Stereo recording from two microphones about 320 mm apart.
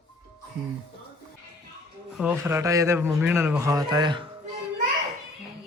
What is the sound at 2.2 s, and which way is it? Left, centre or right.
Speech, centre.